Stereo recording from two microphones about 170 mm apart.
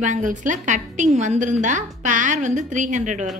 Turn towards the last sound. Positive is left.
turn(degrees=-45)  # may be behind; listen again after turning